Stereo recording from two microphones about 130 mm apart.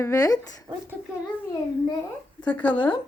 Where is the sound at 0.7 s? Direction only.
25° right (ahead or behind).